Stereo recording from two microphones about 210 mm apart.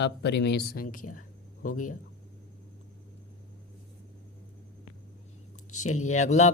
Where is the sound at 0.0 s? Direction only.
55° left (ahead or behind); by 2.0 s 40° left (ahead or behind).